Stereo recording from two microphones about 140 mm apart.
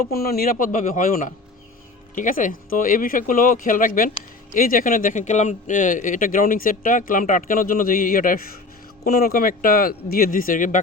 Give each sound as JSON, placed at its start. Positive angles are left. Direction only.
{"t": 0.1, "sound": "speech", "side_deg": 90}